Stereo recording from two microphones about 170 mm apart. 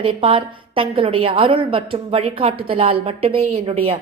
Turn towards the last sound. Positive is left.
turn(degrees=-35)  # may be behind; listen again after turning